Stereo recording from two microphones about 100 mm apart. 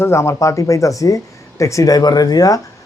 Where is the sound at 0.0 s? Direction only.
30° left (ahead or behind).